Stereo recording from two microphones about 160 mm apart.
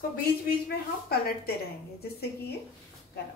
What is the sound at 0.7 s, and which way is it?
A woman's voice, 80° left.